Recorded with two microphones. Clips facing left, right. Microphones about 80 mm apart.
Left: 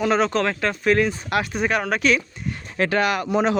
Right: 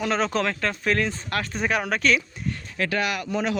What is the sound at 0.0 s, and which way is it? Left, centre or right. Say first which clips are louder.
Speech: left 4 dB; centre.